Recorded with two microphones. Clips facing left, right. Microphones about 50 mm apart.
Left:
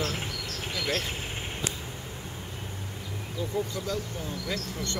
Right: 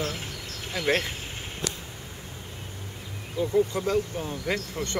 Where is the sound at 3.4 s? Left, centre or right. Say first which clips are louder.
Right 8 dB; right.